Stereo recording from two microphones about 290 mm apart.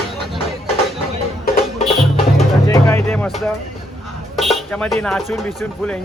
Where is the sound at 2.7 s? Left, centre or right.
Centre.